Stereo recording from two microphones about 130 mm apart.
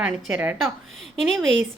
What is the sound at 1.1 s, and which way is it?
Speech, centre (ahead or behind).